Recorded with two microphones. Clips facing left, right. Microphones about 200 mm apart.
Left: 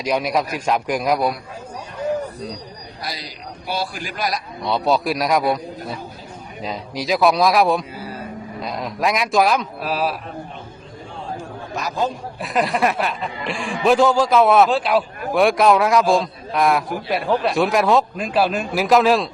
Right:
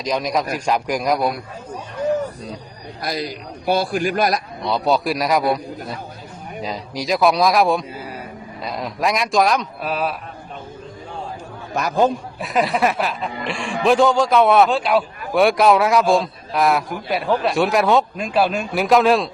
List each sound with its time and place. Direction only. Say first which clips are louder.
0.0 s a man's voice: left 1 dB; 10° left (ahead or behind)
3.0 s a man's voice: right 7 dB; 50° right (ahead or behind)
4.6 s a man's voice: even; centre (ahead or behind)
11.7 s a man's voice: right 6 dB; 55° right (ahead or behind)
12.4 s a man's voice: right 1 dB; centre (ahead or behind)